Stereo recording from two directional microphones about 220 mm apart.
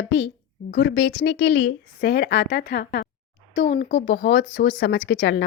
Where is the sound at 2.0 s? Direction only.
45° left (ahead or behind).